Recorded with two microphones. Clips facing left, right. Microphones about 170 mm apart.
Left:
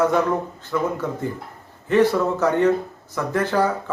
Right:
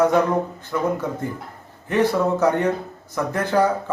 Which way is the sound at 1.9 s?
15° right (ahead or behind).